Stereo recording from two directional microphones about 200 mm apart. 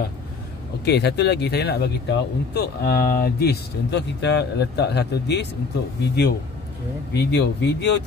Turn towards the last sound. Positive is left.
turn(degrees=60)  # may be behind; listen again after turning